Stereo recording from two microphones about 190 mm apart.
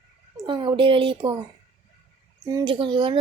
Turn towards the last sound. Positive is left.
turn(degrees=-25)  # may be behind; listen again after turning